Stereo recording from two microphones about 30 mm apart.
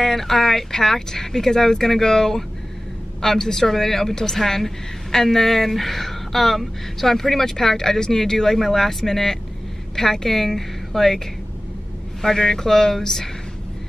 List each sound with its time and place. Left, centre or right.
0.0 s a woman's voice: centre
12.4 s a woman's voice: centre